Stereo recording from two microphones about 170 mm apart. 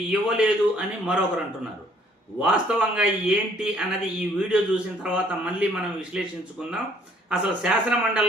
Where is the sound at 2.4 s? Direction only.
5° right (ahead or behind).